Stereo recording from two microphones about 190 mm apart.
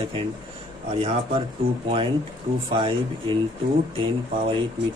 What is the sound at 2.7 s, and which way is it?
Speech, 25° right (ahead or behind).